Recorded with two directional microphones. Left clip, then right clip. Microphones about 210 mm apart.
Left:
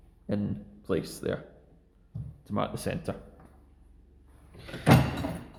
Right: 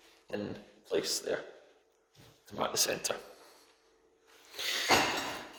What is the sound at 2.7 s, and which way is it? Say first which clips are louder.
Speech: right 3 dB; 45° right (ahead or behind).